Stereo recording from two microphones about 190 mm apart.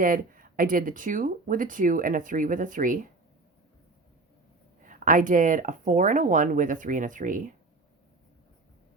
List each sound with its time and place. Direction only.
0.0 s speech: 45° right (ahead or behind)
4.9 s speech: 45° right (ahead or behind)